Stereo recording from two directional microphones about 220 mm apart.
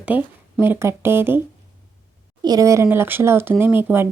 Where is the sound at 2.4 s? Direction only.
15° right (ahead or behind).